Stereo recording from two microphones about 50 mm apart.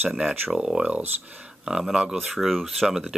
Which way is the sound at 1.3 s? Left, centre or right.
Right.